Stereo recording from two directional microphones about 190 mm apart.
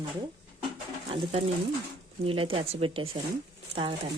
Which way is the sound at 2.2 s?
30° right (ahead or behind).